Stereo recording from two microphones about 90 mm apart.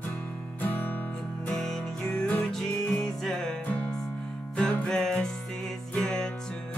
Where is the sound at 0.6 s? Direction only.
20° left (ahead or behind).